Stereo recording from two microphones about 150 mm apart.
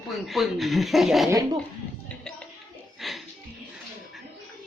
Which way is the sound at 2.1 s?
5° left (ahead or behind).